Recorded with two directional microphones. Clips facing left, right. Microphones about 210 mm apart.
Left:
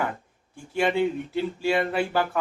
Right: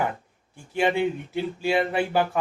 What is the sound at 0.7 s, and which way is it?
Speech, 20° right (ahead or behind).